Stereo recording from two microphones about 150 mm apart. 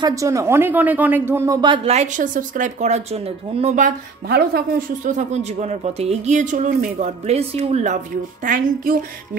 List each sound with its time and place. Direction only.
0.0 s speech: 20° right (ahead or behind)
1.9 s speech: 50° right (ahead or behind)
3.7 s speech: 75° right (ahead or behind)